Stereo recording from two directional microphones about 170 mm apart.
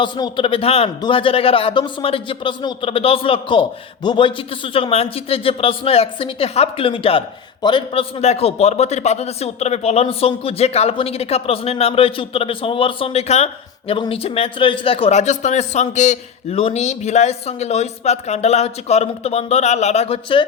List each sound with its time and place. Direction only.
0.0 s a man's voice: 30° left (ahead or behind)